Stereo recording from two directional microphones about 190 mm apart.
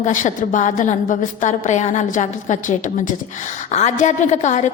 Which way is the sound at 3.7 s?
40° left (ahead or behind).